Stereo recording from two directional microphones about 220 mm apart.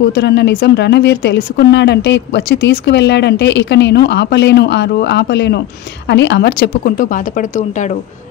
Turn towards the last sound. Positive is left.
turn(degrees=35)  # may be behind; listen again after turning